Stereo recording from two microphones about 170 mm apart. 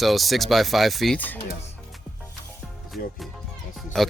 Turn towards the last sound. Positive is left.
turn(degrees=5)  # may be behind; listen again after turning